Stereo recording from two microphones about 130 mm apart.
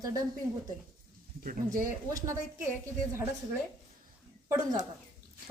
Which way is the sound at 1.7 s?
25° right (ahead or behind).